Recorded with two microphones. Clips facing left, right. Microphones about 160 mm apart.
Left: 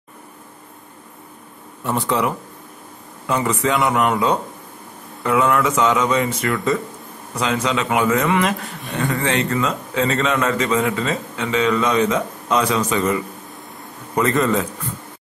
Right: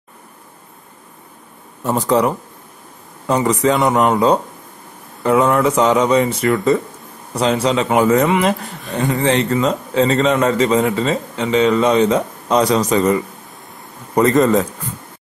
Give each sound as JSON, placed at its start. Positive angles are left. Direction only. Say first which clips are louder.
{"t": 1.9, "sound": "a man's voice", "louder": "right 5 dB", "side_deg": -40}
{"t": 5.2, "sound": "a man's voice", "louder": "right 4 dB", "side_deg": -35}
{"t": 8.6, "sound": "speech", "louder": "right 1 dB", "side_deg": 0}
{"t": 8.9, "sound": "a man's voice", "louder": "right 4 dB", "side_deg": -25}